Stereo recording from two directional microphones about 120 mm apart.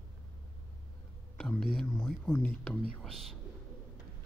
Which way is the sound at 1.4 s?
5° left (ahead or behind).